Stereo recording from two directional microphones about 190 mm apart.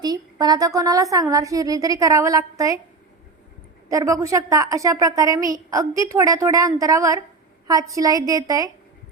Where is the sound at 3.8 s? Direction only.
15° right (ahead or behind).